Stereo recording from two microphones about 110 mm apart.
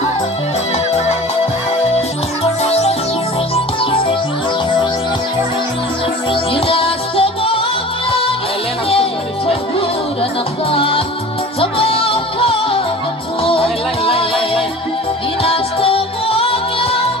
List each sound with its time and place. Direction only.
2.4 s music: 70° left (ahead or behind)
6.5 s music: 55° left (ahead or behind)
10.7 s music: 55° left (ahead or behind)